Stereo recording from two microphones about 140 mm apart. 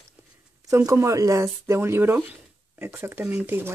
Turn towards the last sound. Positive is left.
turn(degrees=-15)  # may be behind; listen again after turning